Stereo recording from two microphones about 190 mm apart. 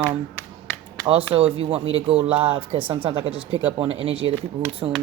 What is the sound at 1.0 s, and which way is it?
Speech, 30° right (ahead or behind).